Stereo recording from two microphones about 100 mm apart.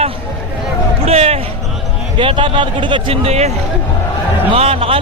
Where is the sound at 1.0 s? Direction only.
85° right.